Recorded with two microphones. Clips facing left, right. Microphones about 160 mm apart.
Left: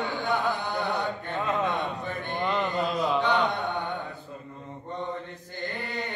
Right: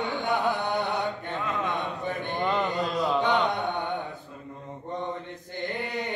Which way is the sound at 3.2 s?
20° right (ahead or behind).